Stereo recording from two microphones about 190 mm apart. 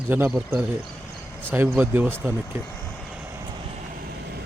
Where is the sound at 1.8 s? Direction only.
10° right (ahead or behind).